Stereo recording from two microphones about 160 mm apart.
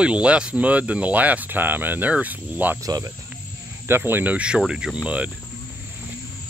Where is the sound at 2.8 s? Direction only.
20° right (ahead or behind).